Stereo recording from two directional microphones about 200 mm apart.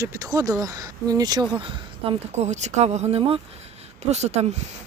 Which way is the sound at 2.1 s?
35° right (ahead or behind).